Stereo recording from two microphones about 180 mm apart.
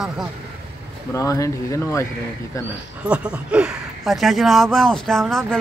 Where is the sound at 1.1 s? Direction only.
15° left (ahead or behind).